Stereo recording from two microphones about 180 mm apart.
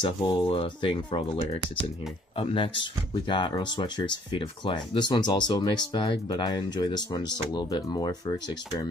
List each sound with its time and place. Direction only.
0.0 s speech: 25° left (ahead or behind)